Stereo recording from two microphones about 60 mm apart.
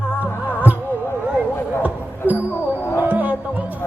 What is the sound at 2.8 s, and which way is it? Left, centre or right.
Music, left.